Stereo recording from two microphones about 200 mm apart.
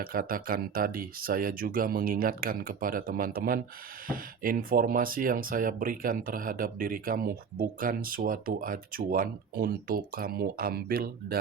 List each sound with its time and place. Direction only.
0.0 s speech: 45° right (ahead or behind)